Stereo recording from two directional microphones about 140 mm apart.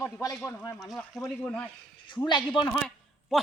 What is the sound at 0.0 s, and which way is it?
Speech, 25° left (ahead or behind).